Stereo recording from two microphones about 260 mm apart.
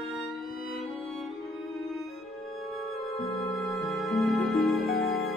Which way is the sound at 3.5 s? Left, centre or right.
Centre.